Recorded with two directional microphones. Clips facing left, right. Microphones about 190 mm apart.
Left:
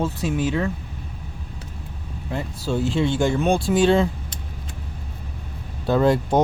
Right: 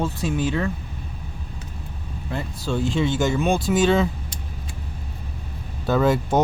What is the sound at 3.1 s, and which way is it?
Speech, 30° left (ahead or behind).